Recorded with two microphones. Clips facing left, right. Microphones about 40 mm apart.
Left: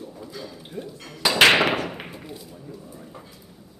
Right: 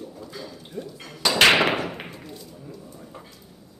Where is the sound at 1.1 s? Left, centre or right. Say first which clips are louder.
Left 1 dB; centre.